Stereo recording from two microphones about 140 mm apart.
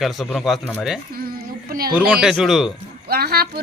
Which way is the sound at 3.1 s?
90° right.